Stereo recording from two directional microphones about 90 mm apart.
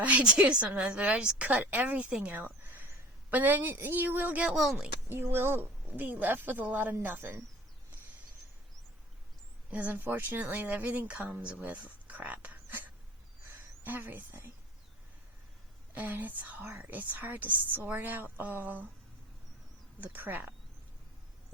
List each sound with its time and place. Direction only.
0.0 s a woman's voice: 15° right (ahead or behind)
9.6 s speech: 20° right (ahead or behind)
13.8 s speech: 25° right (ahead or behind)
16.0 s speech: 20° right (ahead or behind)
20.0 s speech: 20° right (ahead or behind)